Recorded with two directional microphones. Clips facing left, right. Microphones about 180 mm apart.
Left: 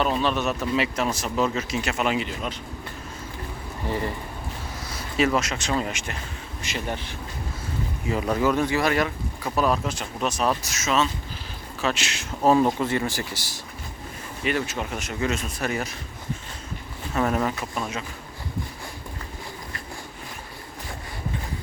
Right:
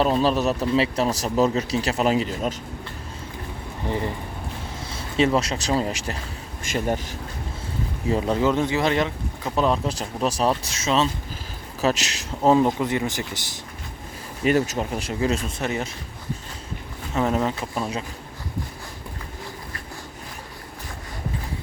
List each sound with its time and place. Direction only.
0.0 s speech: 35° right (ahead or behind)
3.8 s speech: 20° right (ahead or behind); by 6.1 s 35° right (ahead or behind)
6.6 s speech: 45° right (ahead or behind)
8.1 s speech: 25° right (ahead or behind)
12.4 s speech: 20° right (ahead or behind)
14.4 s speech: 40° right (ahead or behind); by 15.9 s 25° right (ahead or behind)
17.2 s speech: 20° right (ahead or behind)